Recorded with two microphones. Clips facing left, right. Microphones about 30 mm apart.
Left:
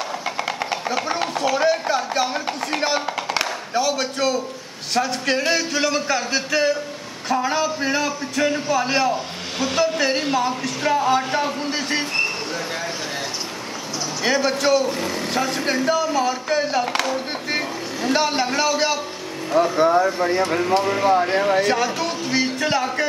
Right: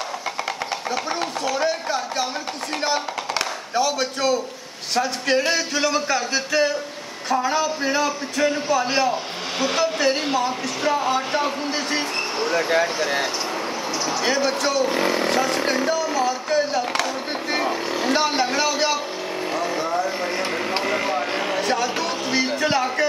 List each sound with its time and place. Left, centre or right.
0.2 s speech: centre
12.5 s speech: centre
14.2 s speech: centre
14.9 s vehicle: right
15.3 s speech: centre
20.2 s speech: centre
21.5 s speech: centre